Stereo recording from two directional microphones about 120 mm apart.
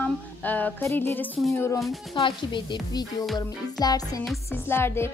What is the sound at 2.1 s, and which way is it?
Speech, 40° left (ahead or behind).